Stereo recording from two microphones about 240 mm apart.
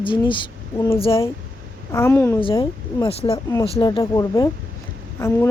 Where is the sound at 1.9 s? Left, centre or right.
Centre.